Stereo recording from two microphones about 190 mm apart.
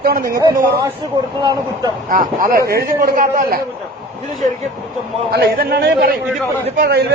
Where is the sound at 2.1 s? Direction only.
45° right (ahead or behind).